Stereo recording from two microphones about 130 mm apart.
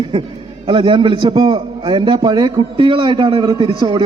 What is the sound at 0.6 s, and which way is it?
A man's voice, 40° right (ahead or behind).